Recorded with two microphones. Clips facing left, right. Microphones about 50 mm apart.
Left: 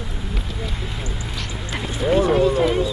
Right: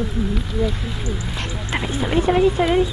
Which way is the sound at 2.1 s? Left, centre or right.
Centre.